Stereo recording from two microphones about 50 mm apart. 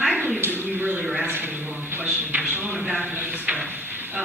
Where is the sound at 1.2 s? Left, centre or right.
Right.